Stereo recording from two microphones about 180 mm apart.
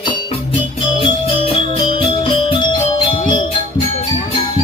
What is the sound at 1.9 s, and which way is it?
Music, 25° left (ahead or behind).